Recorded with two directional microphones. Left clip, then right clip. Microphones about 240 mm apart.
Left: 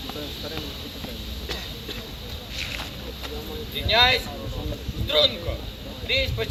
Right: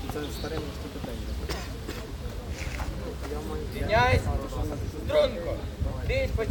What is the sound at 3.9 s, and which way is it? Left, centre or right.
A man's voice, centre.